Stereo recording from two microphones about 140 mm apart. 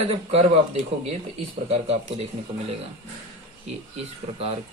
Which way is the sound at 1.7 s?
45° right (ahead or behind).